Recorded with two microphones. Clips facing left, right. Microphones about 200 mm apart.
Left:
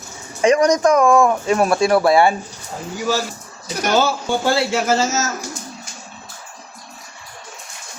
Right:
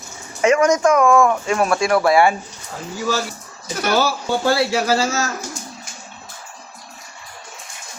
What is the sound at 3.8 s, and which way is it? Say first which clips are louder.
Speech: left 1 dB; 25° left (ahead or behind).